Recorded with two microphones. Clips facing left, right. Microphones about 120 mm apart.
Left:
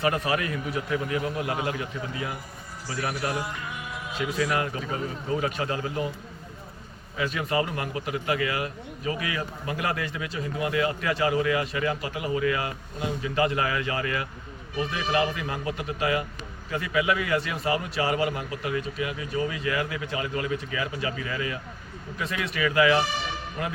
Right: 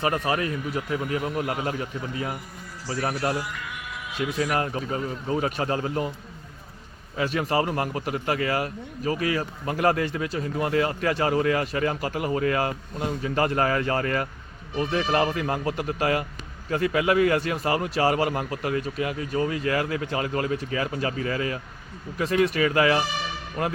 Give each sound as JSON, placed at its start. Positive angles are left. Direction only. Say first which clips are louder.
{"t": 0.0, "sound": "a man's voice", "louder": "right 1 dB", "side_deg": -30}
{"t": 3.3, "sound": "music", "louder": "even", "side_deg": 25}
{"t": 4.2, "sound": "a man's voice", "louder": "right 1 dB", "side_deg": -30}
{"t": 7.2, "sound": "a man's voice", "louder": "right 3 dB", "side_deg": -40}